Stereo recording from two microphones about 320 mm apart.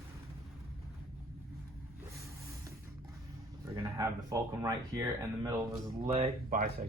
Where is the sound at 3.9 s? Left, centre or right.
Centre.